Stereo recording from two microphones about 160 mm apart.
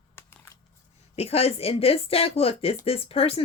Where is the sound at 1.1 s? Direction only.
40° left (ahead or behind).